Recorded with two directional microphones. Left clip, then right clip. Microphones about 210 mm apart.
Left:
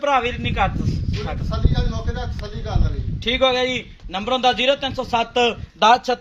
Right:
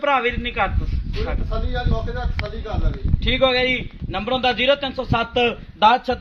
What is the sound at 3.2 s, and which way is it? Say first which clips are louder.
A man's voice: even; 55° left (ahead or behind).